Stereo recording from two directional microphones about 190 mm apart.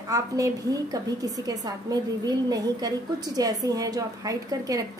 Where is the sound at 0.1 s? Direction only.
15° right (ahead or behind).